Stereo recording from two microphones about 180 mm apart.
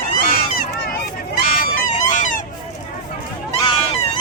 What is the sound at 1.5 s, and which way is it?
Music, 55° left (ahead or behind).